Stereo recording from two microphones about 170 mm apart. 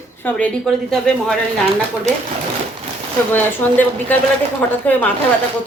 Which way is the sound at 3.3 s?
10° left (ahead or behind).